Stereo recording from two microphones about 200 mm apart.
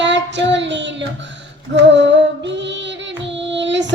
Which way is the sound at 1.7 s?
65° right (ahead or behind).